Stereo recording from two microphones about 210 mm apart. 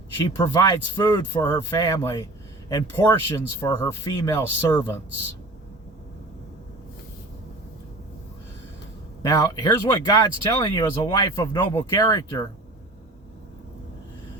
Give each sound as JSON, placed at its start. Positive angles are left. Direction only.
{"t": 0.3, "sound": "speech", "side_deg": 15}
{"t": 9.2, "sound": "speech", "side_deg": 15}